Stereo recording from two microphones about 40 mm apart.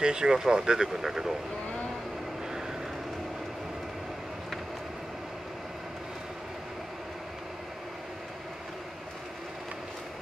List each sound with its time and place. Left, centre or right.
0.0 s speech: centre